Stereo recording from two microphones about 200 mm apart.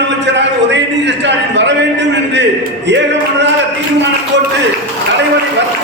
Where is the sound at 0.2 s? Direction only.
60° right (ahead or behind).